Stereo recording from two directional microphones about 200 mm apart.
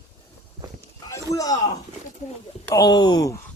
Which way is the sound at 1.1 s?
15° left (ahead or behind).